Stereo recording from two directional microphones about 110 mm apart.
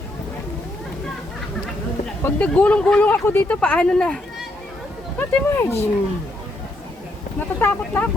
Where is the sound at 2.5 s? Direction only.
10° left (ahead or behind).